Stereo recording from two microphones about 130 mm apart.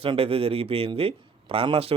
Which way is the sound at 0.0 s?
45° right (ahead or behind).